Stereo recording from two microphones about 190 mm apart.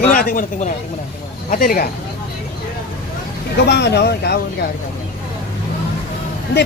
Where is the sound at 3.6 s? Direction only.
60° left (ahead or behind).